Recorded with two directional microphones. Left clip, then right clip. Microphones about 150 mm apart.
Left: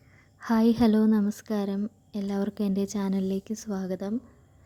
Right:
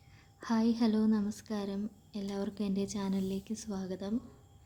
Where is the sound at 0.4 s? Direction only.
55° left (ahead or behind).